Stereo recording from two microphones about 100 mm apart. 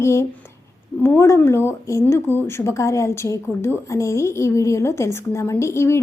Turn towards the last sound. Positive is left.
turn(degrees=25)  # may be behind; listen again after turning